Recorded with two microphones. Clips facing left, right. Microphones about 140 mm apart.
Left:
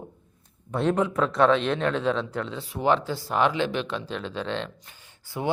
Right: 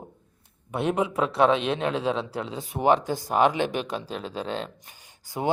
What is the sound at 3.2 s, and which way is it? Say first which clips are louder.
A man's voice: right 2 dB; 45° right (ahead or behind).